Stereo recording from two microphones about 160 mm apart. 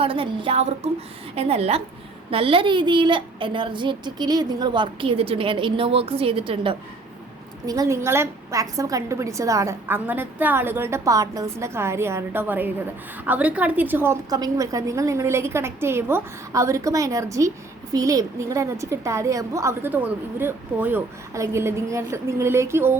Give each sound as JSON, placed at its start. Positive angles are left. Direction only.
{"t": 0.0, "sound": "a child's voice", "side_deg": -35}
{"t": 7.7, "sound": "a woman's voice", "side_deg": -20}